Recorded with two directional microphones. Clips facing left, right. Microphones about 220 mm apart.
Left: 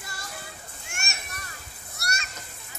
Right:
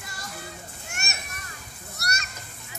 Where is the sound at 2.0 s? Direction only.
40° right (ahead or behind).